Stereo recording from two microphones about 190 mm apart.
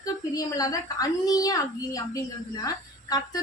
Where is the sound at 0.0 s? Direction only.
20° left (ahead or behind).